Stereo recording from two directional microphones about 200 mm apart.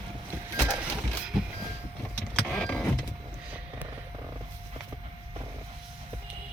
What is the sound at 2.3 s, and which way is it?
Vehicle, 5° left (ahead or behind).